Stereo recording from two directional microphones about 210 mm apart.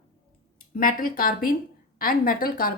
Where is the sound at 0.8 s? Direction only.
45° left (ahead or behind).